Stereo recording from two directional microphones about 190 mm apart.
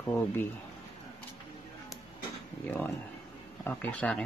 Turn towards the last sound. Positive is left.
turn(degrees=5)  # may be behind; listen again after turning